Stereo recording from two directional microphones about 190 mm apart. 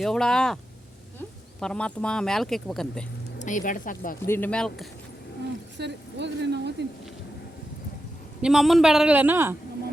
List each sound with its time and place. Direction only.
0.0 s speech: 5° left (ahead or behind)
3.3 s speech: 40° left (ahead or behind)
4.3 s speech: 10° left (ahead or behind)
5.8 s speech: 65° right (ahead or behind)
8.4 s speech: 5° right (ahead or behind)